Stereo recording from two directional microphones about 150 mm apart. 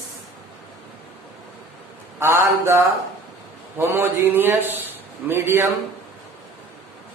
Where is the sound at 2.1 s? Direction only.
15° right (ahead or behind).